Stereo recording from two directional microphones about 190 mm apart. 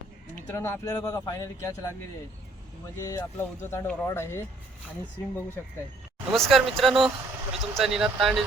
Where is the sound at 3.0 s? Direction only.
15° left (ahead or behind).